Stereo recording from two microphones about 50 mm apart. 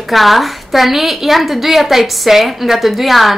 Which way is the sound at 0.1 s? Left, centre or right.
Centre.